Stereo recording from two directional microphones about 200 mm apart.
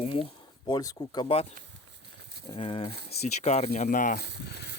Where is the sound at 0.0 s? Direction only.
25° left (ahead or behind).